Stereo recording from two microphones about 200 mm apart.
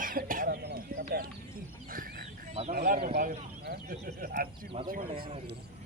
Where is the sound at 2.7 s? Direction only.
50° right (ahead or behind).